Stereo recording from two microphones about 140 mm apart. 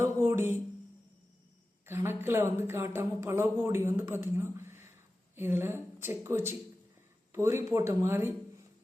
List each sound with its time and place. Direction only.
0.0 s music: 15° right (ahead or behind)
1.9 s speech: 15° right (ahead or behind)